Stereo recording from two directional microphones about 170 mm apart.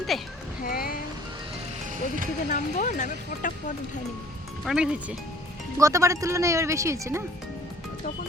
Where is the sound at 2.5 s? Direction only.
45° left (ahead or behind).